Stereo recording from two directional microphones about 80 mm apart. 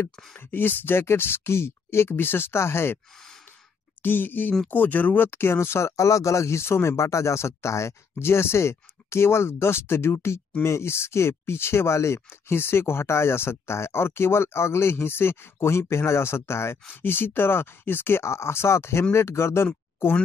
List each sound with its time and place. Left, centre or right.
0.1 s speech: centre
0.4 s speech: left
4.0 s speech: left
16.8 s speech: left